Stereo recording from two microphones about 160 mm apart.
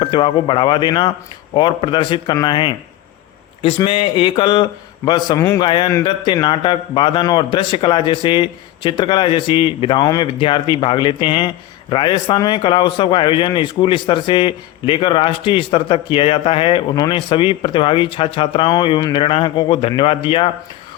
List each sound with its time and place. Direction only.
0.0 s speech: 30° left (ahead or behind)
3.8 s a man's voice: 35° left (ahead or behind)